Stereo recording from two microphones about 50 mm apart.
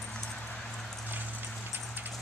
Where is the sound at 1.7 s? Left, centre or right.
Right.